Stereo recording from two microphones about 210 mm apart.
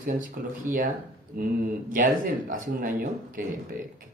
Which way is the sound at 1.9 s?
40° right (ahead or behind).